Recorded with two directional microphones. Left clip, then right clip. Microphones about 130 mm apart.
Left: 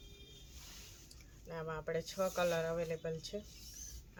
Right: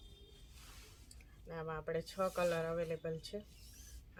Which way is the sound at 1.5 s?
10° right (ahead or behind).